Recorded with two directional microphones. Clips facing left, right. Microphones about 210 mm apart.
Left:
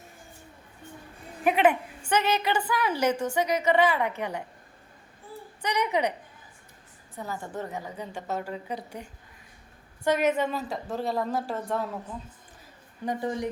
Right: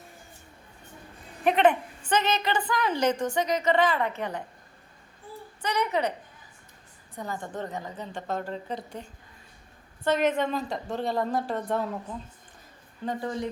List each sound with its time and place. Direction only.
1.5 s a woman's voice: 5° left (ahead or behind)
5.6 s a woman's voice: 15° left (ahead or behind)
7.2 s a woman's voice: 5° left (ahead or behind)
13.1 s a woman's voice: 15° left (ahead or behind)